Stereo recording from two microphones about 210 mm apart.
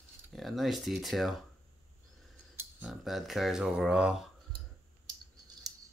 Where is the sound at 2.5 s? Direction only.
10° right (ahead or behind).